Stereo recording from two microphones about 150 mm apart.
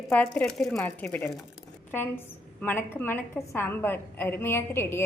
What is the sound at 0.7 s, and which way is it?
A woman's voice, 15° left (ahead or behind).